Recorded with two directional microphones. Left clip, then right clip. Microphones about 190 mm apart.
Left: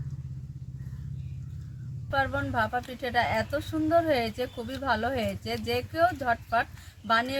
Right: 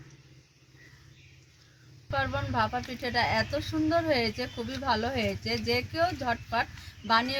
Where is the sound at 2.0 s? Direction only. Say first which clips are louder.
Left 3 dB; 5° right (ahead or behind).